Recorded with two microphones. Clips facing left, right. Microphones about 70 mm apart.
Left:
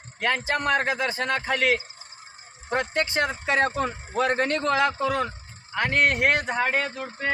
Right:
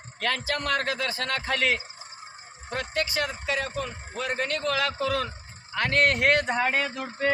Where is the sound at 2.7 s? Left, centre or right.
Left.